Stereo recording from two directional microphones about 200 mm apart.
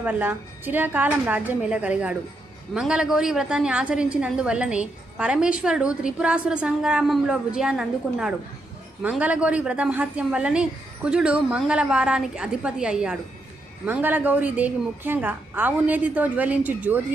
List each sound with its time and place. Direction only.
0.0 s a woman's voice: 10° right (ahead or behind)